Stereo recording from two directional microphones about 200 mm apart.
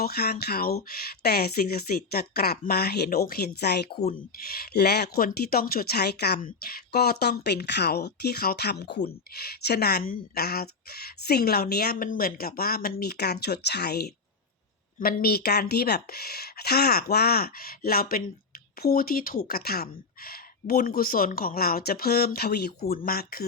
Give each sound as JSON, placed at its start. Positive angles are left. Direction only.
{"t": 0.0, "sound": "speech", "side_deg": 50}